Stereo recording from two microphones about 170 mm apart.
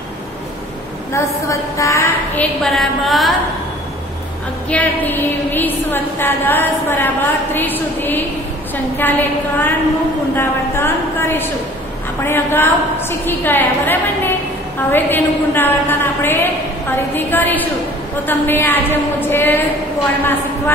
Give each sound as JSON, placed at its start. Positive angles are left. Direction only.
{"t": 1.1, "sound": "a woman's voice", "side_deg": 20}
{"t": 2.6, "sound": "a woman's voice", "side_deg": 0}
{"t": 4.6, "sound": "a woman's voice", "side_deg": 10}